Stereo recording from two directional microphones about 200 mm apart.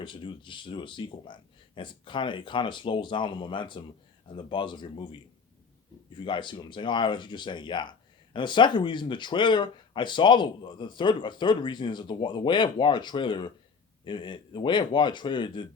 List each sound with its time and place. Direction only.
0.0 s speech: 25° left (ahead or behind)
6.1 s speech: 25° left (ahead or behind)